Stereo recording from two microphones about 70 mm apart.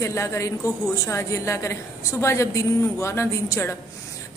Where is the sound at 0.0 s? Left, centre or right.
Left.